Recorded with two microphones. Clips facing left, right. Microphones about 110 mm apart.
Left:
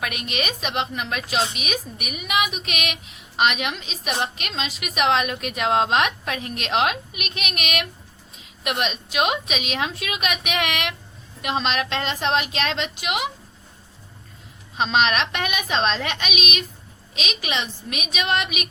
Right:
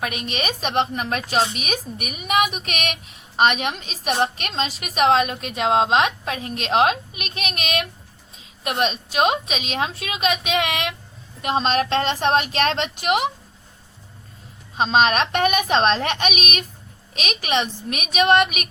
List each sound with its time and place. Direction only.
0.0 s a woman's voice: 35° right (ahead or behind)
14.8 s a child's voice: 35° right (ahead or behind); by 18.7 s 50° right (ahead or behind)